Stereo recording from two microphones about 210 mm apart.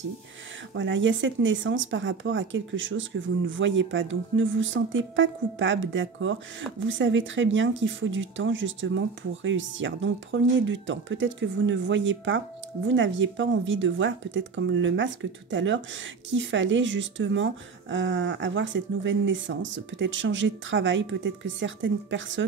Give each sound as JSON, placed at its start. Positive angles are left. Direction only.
{"t": 0.7, "sound": "a woman's voice", "side_deg": -60}